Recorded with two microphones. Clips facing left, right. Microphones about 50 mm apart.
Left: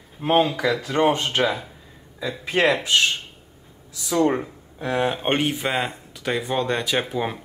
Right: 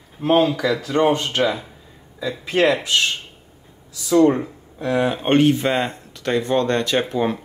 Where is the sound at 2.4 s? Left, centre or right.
Left.